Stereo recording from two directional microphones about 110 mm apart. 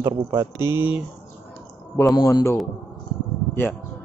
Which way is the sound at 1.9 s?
35° left (ahead or behind).